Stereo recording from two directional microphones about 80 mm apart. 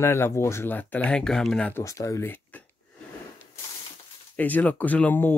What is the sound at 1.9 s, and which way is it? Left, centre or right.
Speech, left.